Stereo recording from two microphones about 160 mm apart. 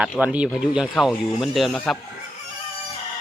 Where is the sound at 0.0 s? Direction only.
10° right (ahead or behind).